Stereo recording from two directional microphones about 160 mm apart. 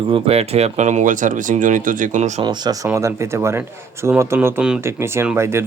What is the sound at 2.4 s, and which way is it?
Speech, 25° right (ahead or behind).